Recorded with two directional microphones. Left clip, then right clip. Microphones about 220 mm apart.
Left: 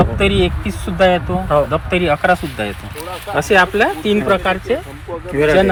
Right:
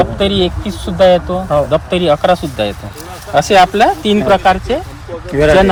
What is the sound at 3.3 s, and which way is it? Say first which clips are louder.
Speech: right 4 dB; 45° right (ahead or behind).